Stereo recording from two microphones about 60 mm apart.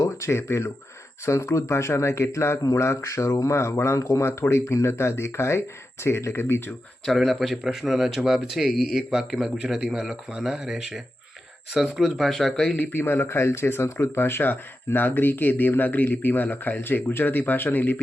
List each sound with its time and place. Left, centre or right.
0.0 s speech: left
2.6 s speech: left
2.8 s speech: left
7.0 s speech: centre
12.7 s speech: left